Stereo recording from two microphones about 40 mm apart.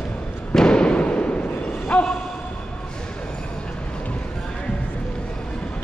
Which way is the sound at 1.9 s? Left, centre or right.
Left.